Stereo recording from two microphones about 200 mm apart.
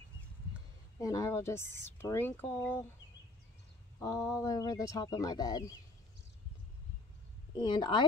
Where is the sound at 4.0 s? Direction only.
15° left (ahead or behind).